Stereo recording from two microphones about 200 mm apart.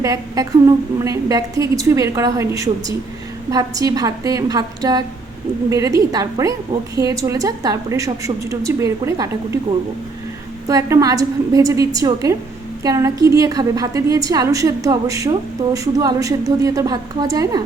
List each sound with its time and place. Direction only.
0.0 s a woman's voice: 15° right (ahead or behind)
10.7 s a woman's voice: 15° right (ahead or behind)